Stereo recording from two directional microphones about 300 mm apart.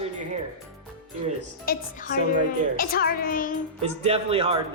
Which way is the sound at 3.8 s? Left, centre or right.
Centre.